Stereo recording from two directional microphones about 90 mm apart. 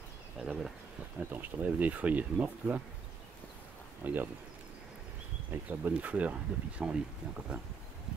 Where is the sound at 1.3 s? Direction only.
20° right (ahead or behind).